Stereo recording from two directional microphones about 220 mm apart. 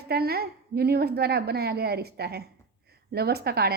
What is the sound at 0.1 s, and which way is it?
A woman's voice, 45° right (ahead or behind).